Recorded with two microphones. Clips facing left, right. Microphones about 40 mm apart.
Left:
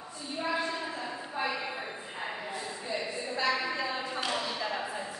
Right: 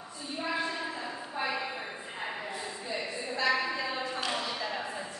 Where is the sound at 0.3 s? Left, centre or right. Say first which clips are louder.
Left 1 dB; centre.